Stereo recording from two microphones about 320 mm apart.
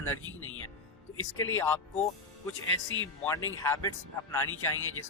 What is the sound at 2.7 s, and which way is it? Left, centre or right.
Speech, left.